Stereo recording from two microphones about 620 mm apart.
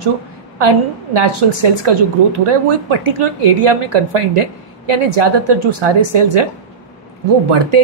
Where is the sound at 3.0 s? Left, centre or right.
Right.